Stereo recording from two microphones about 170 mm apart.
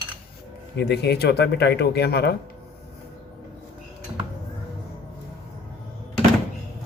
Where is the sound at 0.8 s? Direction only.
75° left (ahead or behind).